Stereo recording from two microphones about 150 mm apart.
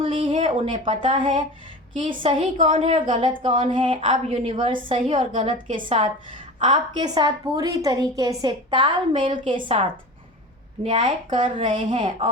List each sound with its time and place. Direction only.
0.0 s a sound: 35° right (ahead or behind)
0.9 s a woman's voice: 35° right (ahead or behind)
6.6 s a woman's voice: 30° right (ahead or behind)